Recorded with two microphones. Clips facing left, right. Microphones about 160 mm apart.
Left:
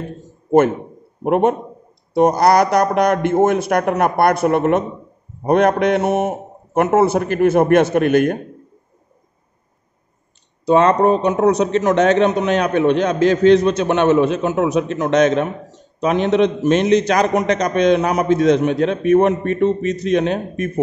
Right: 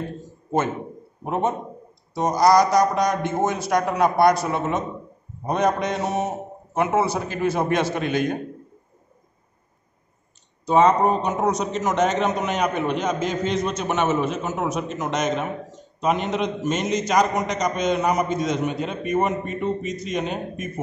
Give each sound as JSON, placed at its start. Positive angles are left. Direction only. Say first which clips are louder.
{"t": 1.2, "sound": "a man's voice", "louder": "left 8 dB", "side_deg": 65}
{"t": 10.7, "sound": "a man's voice", "louder": "left 4 dB", "side_deg": 70}